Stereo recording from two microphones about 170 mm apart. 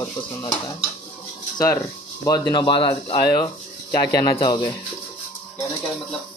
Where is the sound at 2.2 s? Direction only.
20° left (ahead or behind).